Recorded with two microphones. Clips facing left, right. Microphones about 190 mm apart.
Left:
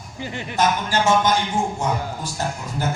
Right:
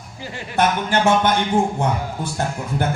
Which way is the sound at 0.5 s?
60° right (ahead or behind).